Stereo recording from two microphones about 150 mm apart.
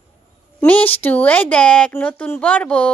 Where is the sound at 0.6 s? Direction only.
10° left (ahead or behind).